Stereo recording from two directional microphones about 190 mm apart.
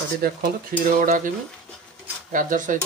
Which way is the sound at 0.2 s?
50° right (ahead or behind).